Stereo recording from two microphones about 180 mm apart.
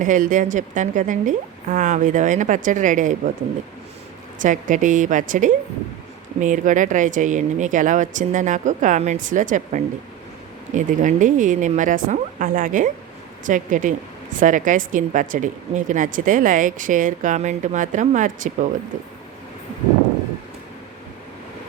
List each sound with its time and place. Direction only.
0.0 s speech: 45° right (ahead or behind)
4.4 s speech: 45° right (ahead or behind)